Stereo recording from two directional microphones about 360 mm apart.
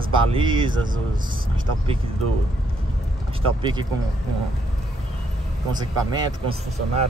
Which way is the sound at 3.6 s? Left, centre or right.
Centre.